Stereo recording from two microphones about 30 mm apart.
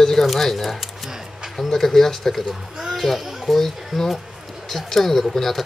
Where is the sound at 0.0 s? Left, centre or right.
Centre.